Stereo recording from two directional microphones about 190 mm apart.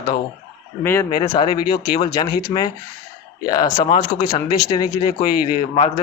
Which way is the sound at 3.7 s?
30° left (ahead or behind).